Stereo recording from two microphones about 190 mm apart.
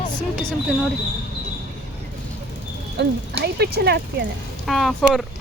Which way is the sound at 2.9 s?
60° right (ahead or behind).